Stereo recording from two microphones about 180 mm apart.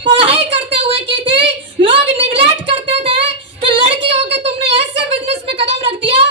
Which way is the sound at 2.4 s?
30° right (ahead or behind).